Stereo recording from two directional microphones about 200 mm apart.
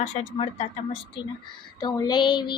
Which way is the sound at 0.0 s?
30° left (ahead or behind).